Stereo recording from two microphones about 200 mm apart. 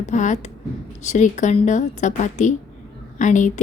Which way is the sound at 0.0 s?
35° left (ahead or behind).